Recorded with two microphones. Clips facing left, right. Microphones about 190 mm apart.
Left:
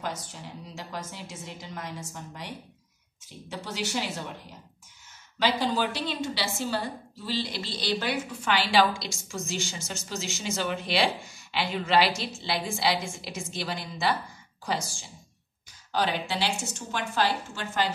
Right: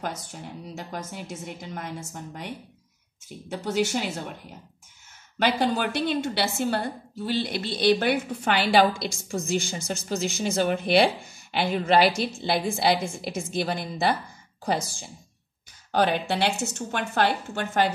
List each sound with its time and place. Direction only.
0.0 s a woman's voice: 50° right (ahead or behind)
5.4 s a woman's voice: 55° right (ahead or behind)
15.9 s a woman's voice: 55° right (ahead or behind)